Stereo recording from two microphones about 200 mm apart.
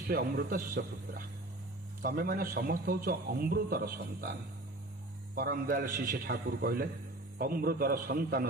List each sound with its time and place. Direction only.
0.0 s speech: 50° right (ahead or behind)